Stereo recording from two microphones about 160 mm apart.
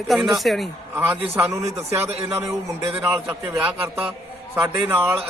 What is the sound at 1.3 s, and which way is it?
Speech, 15° right (ahead or behind).